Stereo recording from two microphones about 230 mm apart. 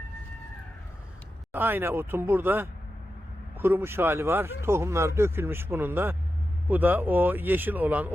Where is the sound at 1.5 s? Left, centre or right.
Centre.